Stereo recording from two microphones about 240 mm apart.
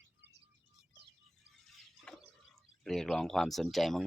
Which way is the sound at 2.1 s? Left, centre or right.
Centre.